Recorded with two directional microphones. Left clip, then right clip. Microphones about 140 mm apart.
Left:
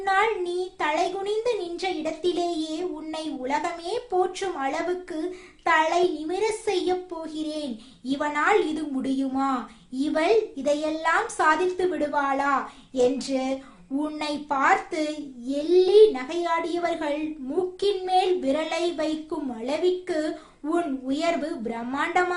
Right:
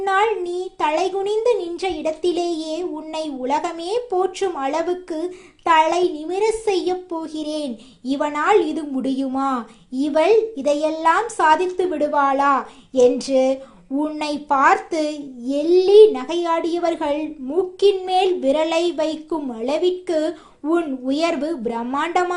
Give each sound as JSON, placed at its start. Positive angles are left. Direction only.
{"t": 0.0, "sound": "a child's voice", "side_deg": -30}